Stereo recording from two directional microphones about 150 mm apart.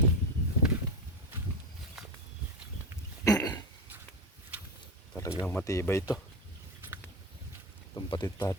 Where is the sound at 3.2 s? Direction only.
25° left (ahead or behind).